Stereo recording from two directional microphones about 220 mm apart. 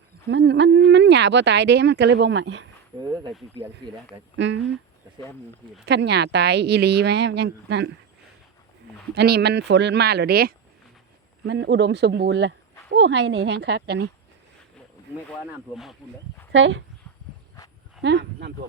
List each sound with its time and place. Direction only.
0.3 s speech: 50° right (ahead or behind)
3.8 s speech: 20° right (ahead or behind)
4.4 s speech: 55° right (ahead or behind)
5.8 s speech: 50° right (ahead or behind)
9.1 s speech: 45° right (ahead or behind)
15.7 s speech: centre (ahead or behind)
16.5 s speech: 55° right (ahead or behind)
18.0 s speech: 50° right (ahead or behind)